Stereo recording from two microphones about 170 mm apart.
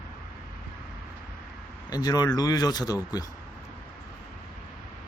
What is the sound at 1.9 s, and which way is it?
Speech, 20° left (ahead or behind).